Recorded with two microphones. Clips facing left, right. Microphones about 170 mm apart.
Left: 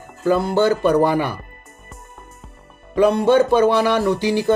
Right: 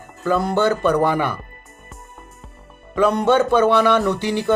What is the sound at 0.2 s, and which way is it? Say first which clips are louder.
Speech: left 2 dB; 30° left (ahead or behind).